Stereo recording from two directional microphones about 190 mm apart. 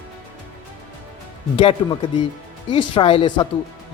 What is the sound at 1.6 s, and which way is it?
Speech, 25° left (ahead or behind).